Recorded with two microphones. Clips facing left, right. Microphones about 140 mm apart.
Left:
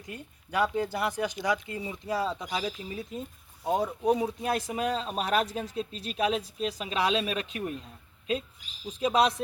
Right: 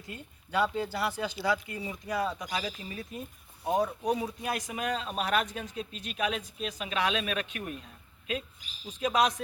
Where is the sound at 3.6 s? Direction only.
25° left (ahead or behind).